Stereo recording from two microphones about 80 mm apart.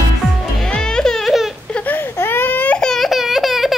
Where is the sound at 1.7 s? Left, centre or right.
Left.